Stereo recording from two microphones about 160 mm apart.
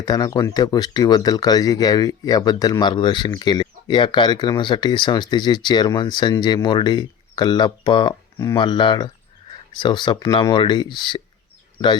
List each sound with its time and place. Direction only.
0.0 s speech: 25° left (ahead or behind)